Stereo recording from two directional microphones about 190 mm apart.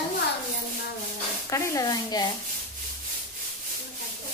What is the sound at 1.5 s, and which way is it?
Speech, 15° left (ahead or behind).